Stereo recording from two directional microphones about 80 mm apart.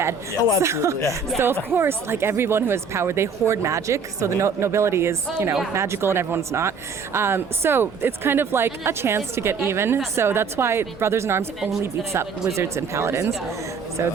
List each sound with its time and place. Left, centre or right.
0.6 s speech: right